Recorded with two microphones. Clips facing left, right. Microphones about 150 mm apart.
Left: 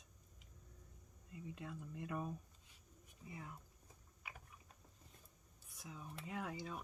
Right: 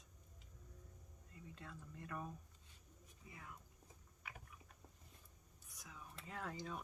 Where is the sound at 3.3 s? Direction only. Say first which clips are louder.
Left 5 dB; 25° left (ahead or behind).